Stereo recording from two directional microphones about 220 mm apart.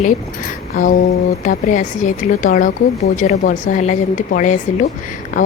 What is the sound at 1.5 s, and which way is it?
Speech, 35° left (ahead or behind).